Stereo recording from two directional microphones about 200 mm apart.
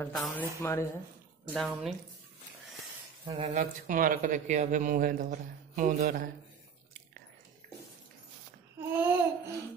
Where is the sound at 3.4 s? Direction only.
35° right (ahead or behind).